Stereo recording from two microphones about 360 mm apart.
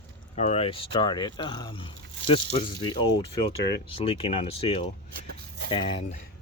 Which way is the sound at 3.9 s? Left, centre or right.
Centre.